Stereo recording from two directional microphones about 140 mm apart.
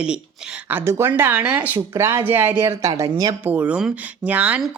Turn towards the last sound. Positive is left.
turn(degrees=-10)  # may be behind; listen again after turning